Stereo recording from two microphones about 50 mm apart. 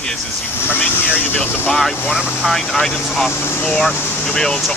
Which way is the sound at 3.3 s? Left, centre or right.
Left.